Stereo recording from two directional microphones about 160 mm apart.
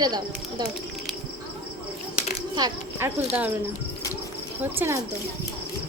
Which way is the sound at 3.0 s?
15° right (ahead or behind).